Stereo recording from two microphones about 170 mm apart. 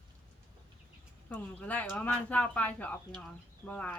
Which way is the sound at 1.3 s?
10° left (ahead or behind).